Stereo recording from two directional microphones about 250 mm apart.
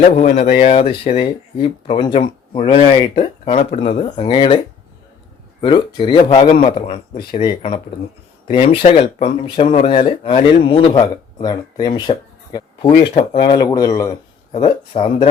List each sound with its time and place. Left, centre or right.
0.0 s speech: left
13.1 s speech: left
13.6 s speech: centre